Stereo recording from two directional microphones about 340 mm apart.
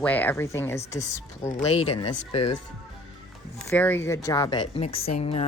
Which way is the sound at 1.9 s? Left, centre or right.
Left.